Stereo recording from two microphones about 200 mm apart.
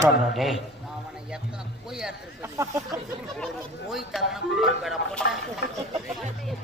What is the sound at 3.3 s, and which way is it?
A man's voice, centre (ahead or behind).